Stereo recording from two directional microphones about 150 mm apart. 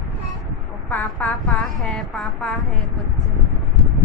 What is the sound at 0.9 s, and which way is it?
A woman's voice, 10° left (ahead or behind).